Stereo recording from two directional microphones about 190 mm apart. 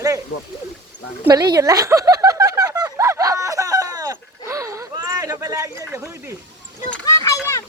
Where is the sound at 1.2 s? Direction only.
20° right (ahead or behind).